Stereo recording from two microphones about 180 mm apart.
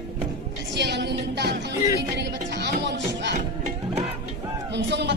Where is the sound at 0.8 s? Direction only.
70° right (ahead or behind).